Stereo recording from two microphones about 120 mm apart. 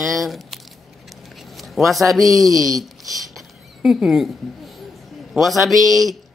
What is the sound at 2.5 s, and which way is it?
Speech, 30° right (ahead or behind).